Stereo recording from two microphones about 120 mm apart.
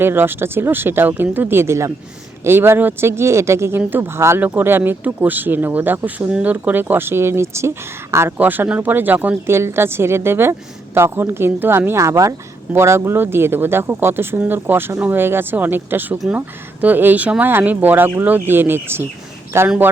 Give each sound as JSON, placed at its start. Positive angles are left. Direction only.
{"t": 0.0, "sound": "speech", "side_deg": -20}